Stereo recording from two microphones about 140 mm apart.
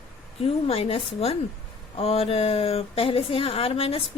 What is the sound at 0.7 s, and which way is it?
Speech, 45° left (ahead or behind).